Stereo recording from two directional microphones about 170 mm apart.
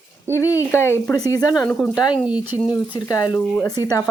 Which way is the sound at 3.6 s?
20° left (ahead or behind).